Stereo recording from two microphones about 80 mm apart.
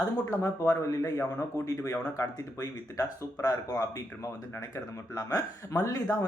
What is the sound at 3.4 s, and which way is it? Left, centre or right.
Speech, left.